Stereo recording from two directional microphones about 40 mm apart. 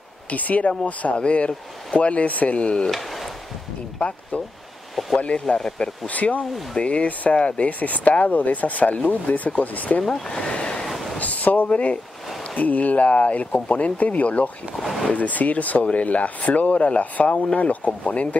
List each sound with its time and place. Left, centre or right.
0.3 s speech: left
2.9 s speech: centre
5.1 s speech: left
5.5 s speech: centre
6.0 s speech: left
6.4 s speech: centre
6.8 s speech: left
10.0 s speech: centre
10.3 s speech: left
11.1 s speech: left
14.8 s speech: centre
15.0 s speech: left